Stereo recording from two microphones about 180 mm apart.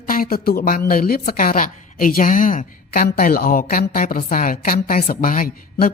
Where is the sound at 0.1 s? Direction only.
55° left (ahead or behind).